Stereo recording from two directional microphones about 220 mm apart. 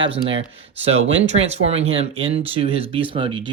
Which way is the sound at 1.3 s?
30° right (ahead or behind).